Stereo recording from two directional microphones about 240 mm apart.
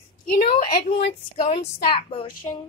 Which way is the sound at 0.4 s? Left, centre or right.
Left.